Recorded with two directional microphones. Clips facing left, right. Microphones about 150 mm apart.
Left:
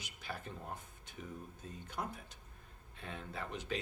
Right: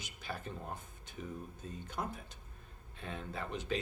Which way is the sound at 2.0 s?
45° right (ahead or behind).